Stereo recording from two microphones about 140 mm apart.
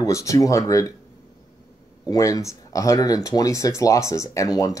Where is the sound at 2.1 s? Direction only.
25° left (ahead or behind).